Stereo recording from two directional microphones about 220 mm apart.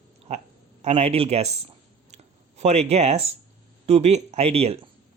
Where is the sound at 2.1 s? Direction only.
30° right (ahead or behind).